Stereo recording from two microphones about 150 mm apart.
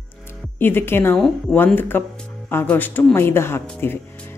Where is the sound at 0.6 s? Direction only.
15° left (ahead or behind).